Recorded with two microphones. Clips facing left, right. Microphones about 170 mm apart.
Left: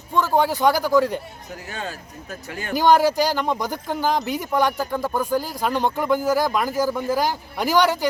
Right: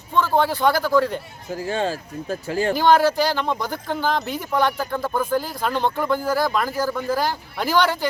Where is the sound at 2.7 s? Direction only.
10° left (ahead or behind).